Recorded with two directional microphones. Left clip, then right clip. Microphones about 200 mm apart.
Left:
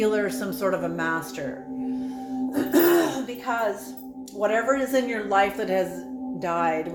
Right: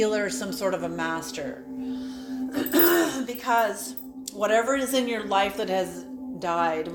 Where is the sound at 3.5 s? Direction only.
30° right (ahead or behind).